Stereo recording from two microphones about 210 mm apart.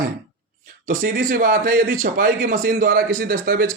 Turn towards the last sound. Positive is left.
turn(degrees=-45)  # may be behind; listen again after turning